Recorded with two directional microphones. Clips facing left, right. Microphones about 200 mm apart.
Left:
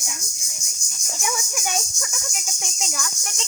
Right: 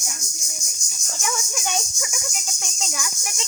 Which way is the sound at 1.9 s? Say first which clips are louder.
Right 2 dB; 10° right (ahead or behind).